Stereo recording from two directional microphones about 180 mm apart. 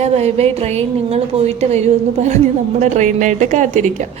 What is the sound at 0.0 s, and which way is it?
A woman's voice, 35° right (ahead or behind).